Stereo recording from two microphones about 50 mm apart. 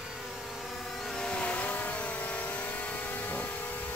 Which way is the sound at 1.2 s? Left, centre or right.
Left.